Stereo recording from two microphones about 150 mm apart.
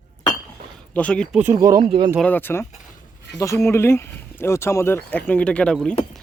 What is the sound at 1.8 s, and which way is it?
Speech, 35° right (ahead or behind).